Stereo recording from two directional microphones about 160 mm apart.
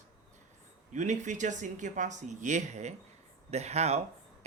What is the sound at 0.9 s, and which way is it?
Speech, 50° right (ahead or behind).